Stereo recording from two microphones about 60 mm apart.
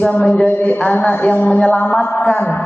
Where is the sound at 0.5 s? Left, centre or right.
Left.